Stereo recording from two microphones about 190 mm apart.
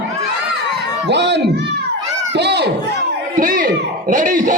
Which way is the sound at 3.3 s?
45° right (ahead or behind).